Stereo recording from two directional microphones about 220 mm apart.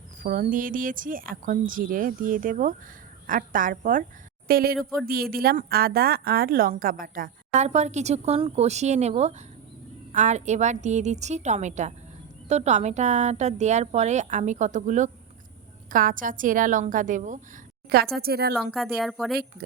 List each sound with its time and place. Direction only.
0.2 s a woman's voice: 40° right (ahead or behind)
18.5 s speech: centre (ahead or behind)